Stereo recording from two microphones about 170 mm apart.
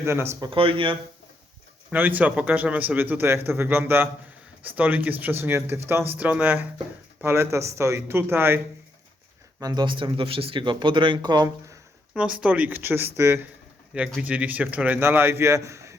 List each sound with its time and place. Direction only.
0.0 s speech: 15° right (ahead or behind); by 0.9 s 30° right (ahead or behind)
1.9 s speech: 10° right (ahead or behind)
9.6 s speech: 25° right (ahead or behind)
12.1 s speech: 5° right (ahead or behind)